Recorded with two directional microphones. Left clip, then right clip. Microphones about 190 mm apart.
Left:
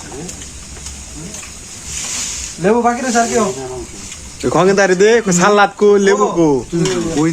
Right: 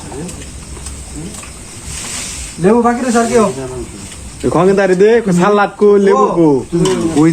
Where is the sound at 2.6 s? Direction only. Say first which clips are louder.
Right 2 dB; centre (ahead or behind).